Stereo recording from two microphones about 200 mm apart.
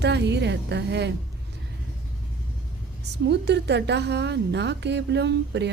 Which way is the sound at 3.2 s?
60° right (ahead or behind).